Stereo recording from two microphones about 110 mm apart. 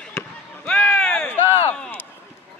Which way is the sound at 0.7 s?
10° left (ahead or behind).